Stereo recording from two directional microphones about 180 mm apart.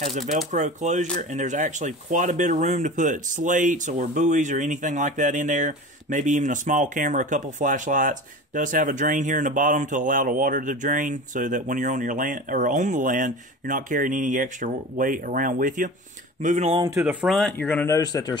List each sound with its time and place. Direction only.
0.3 s speech: 45° right (ahead or behind)
16.4 s speech: 40° right (ahead or behind)
17.0 s speech: 5° right (ahead or behind); by 18.4 s 20° left (ahead or behind)